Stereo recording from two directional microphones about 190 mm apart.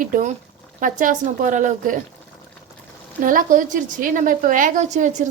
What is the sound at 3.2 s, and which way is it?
A woman's voice, 45° right (ahead or behind).